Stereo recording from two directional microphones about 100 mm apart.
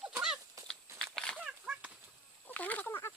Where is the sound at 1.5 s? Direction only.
10° right (ahead or behind).